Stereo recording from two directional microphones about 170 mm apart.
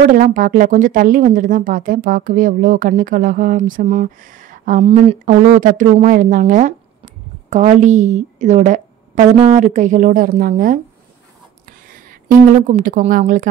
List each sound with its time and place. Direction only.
0.1 s speech: 50° right (ahead or behind)
12.5 s speech: 50° right (ahead or behind)